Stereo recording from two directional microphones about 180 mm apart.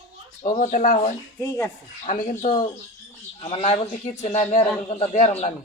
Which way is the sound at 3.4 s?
35° left (ahead or behind).